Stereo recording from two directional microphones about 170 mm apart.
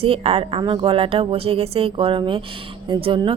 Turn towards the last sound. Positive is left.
turn(degrees=-30)  # may be behind; listen again after turning